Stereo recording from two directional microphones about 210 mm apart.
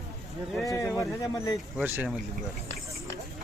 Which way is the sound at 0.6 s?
15° left (ahead or behind).